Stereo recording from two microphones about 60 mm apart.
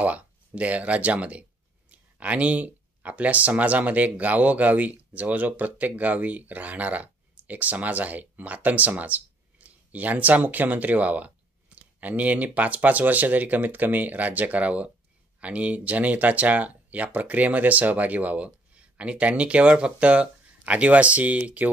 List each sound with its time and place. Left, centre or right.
0.0 s speech: right